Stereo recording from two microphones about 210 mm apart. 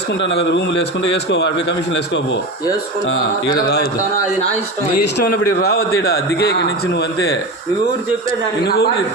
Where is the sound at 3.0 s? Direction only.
55° left (ahead or behind).